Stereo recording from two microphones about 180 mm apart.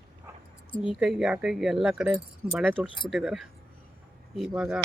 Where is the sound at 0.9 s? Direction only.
5° right (ahead or behind).